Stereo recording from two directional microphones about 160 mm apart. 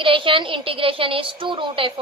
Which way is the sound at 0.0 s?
35° right (ahead or behind).